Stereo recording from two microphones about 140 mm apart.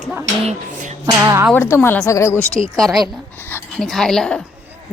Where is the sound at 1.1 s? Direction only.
20° right (ahead or behind).